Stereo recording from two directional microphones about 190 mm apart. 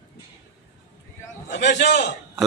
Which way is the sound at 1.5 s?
65° left (ahead or behind).